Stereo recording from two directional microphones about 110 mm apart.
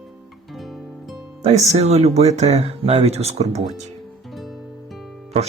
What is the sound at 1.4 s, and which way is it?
Speech, 90° right.